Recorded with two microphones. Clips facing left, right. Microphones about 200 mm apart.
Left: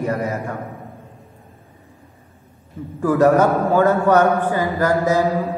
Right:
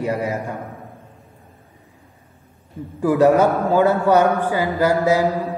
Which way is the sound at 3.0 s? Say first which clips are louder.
Even; 10° right (ahead or behind).